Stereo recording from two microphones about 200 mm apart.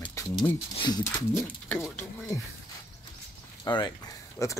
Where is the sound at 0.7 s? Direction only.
20° left (ahead or behind).